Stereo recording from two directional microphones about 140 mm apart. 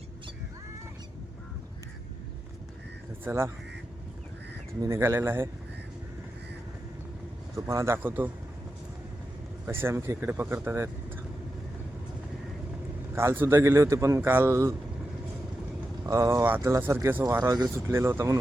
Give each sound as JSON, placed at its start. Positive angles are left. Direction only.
{"t": 3.2, "sound": "speech", "side_deg": -15}
{"t": 4.8, "sound": "speech", "side_deg": -20}
{"t": 7.5, "sound": "speech", "side_deg": -20}
{"t": 9.6, "sound": "speech", "side_deg": -15}
{"t": 13.1, "sound": "a man's voice", "side_deg": -15}
{"t": 16.0, "sound": "a man's voice", "side_deg": -20}